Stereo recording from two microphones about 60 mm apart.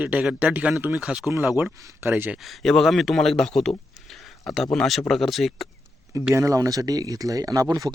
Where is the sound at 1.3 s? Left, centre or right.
Right.